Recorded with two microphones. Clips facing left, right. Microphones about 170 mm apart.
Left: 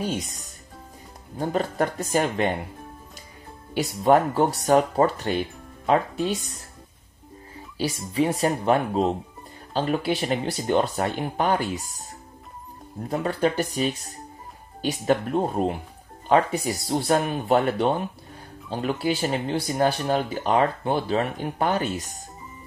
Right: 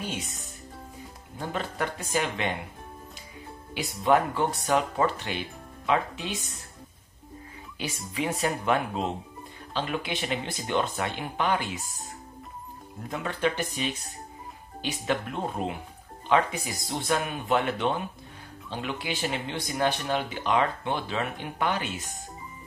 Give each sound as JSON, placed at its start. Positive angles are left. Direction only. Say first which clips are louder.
{"t": 0.0, "sound": "speech", "louder": "left 6 dB", "side_deg": 40}
{"t": 3.7, "sound": "speech", "louder": "left 4 dB", "side_deg": 40}
{"t": 7.7, "sound": "music", "louder": "left 8 dB", "side_deg": 35}
{"t": 8.1, "sound": "speech", "louder": "left 6 dB", "side_deg": 35}
{"t": 13.1, "sound": "speech", "louder": "left 5 dB", "side_deg": 40}